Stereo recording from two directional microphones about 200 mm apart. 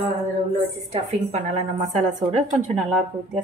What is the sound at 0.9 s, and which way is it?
Speech, 35° right (ahead or behind).